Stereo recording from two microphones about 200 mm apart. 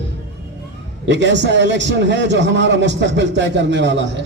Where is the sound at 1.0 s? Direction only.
60° right (ahead or behind).